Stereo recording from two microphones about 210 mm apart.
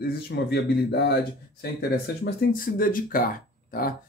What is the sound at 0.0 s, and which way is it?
Speech, 50° left (ahead or behind).